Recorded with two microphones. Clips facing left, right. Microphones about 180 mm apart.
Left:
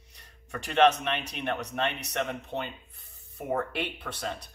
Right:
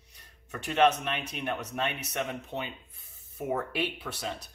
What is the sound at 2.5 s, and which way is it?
Rub, 20° left (ahead or behind).